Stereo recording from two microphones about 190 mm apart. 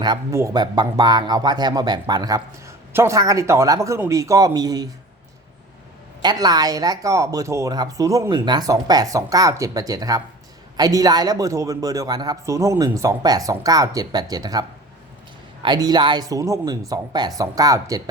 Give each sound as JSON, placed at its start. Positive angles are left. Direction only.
{"t": 0.0, "sound": "speech", "side_deg": -20}
{"t": 6.2, "sound": "speech", "side_deg": -20}
{"t": 15.6, "sound": "speech", "side_deg": -20}